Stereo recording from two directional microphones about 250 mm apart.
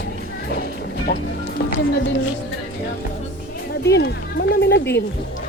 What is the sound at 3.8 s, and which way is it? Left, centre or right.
Speech, left.